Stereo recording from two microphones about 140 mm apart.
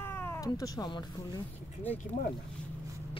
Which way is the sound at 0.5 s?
25° left (ahead or behind).